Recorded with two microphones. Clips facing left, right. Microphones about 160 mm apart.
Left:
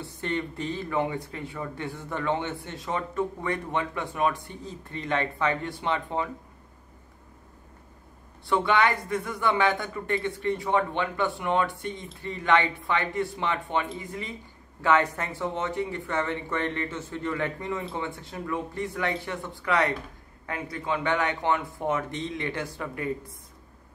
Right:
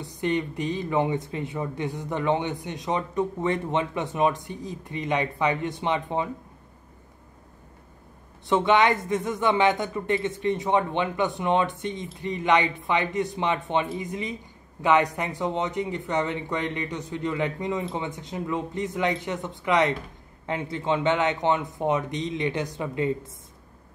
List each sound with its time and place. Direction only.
0.0 s speech: 15° right (ahead or behind)
8.5 s speech: 20° right (ahead or behind)